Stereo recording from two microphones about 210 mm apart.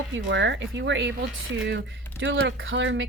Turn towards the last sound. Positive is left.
turn(degrees=-65)  # may be behind; listen again after turning